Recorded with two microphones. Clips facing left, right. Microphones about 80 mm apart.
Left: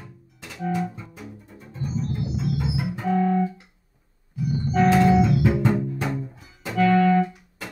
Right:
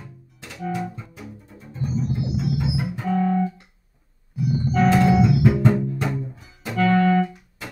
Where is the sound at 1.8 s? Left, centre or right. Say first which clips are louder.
Right 3 dB; centre.